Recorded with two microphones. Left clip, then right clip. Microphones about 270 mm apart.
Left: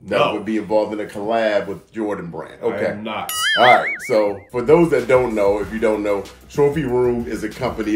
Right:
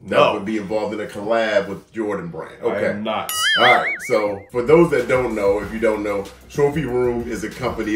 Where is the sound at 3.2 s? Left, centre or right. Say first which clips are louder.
Left 2 dB; centre.